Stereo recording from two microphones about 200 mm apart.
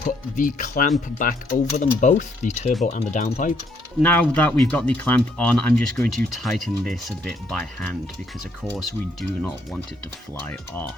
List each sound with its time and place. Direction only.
0.0 s speech: 40° left (ahead or behind)
4.0 s speech: 5° left (ahead or behind)
10.4 s speech: 10° left (ahead or behind)